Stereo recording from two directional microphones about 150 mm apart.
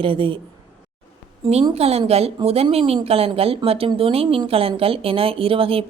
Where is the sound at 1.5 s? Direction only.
45° right (ahead or behind).